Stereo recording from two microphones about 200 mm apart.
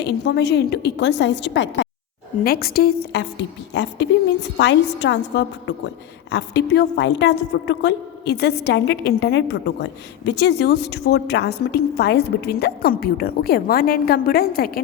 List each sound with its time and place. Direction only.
0.0 s a woman's voice: 55° left (ahead or behind)
2.4 s a woman's voice: 50° left (ahead or behind)